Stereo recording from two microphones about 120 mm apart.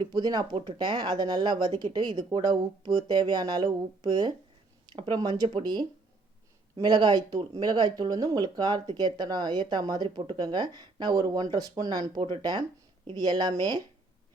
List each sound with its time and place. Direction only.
0.0 s speech: 35° right (ahead or behind)